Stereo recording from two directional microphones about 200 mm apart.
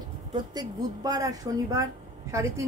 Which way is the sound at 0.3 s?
20° right (ahead or behind).